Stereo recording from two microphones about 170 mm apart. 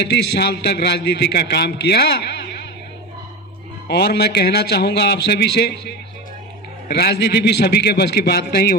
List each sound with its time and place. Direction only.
0.0 s a man's voice: 80° left
3.8 s a man's voice: 75° left (ahead or behind)
6.8 s a man's voice: 70° left (ahead or behind)